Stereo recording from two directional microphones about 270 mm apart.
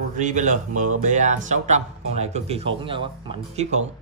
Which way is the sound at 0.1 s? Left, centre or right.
Right.